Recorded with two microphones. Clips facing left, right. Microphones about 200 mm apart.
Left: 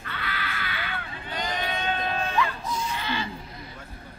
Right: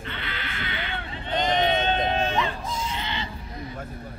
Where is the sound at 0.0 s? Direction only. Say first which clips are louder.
Even; 25° right (ahead or behind).